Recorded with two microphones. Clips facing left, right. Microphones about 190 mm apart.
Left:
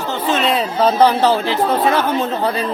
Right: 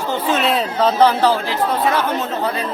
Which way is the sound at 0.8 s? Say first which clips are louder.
Left 1 dB; 15° left (ahead or behind).